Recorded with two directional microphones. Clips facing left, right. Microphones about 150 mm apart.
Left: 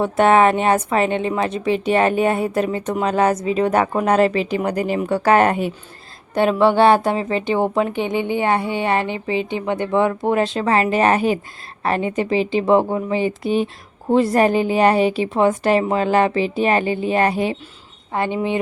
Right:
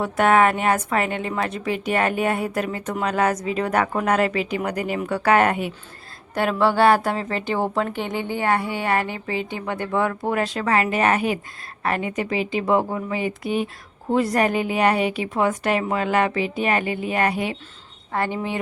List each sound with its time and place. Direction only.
0.0 s a woman's voice: 25° left (ahead or behind)
6.3 s a woman's voice: 20° left (ahead or behind)
18.1 s a woman's voice: 20° left (ahead or behind)